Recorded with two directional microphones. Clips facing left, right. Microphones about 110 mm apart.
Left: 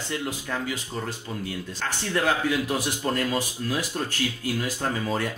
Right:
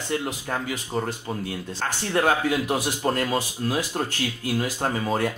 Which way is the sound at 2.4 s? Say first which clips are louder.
Right 2 dB; 20° right (ahead or behind).